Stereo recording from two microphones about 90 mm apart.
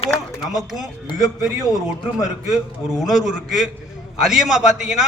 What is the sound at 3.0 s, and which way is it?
A man's voice, 5° right (ahead or behind).